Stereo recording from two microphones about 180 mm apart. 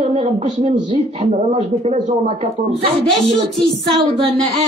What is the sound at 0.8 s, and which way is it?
A man's voice, 35° right (ahead or behind).